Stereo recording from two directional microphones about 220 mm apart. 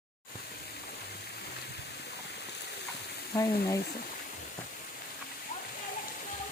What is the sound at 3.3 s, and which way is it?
Speech, 15° left (ahead or behind).